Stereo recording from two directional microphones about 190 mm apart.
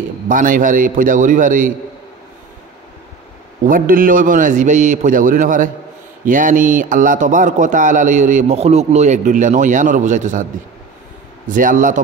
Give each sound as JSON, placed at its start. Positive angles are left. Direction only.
{"t": 0.3, "sound": "a man's voice", "side_deg": -45}
{"t": 3.6, "sound": "a man's voice", "side_deg": -45}
{"t": 11.4, "sound": "a man's voice", "side_deg": -45}